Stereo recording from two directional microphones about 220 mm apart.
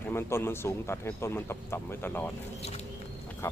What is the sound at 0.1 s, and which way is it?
Speech, 10° left (ahead or behind).